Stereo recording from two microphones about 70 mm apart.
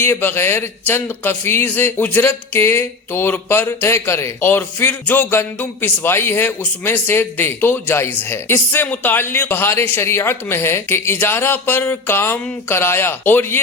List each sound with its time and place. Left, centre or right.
0.0 s speech: left